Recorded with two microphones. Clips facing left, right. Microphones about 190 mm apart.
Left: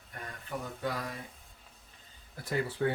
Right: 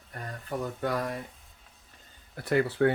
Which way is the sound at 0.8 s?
55° right (ahead or behind).